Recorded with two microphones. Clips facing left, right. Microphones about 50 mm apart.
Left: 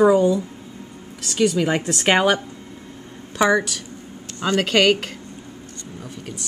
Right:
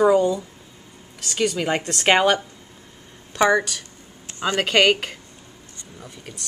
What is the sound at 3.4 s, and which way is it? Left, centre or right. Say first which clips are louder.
A woman's voice: even; centre.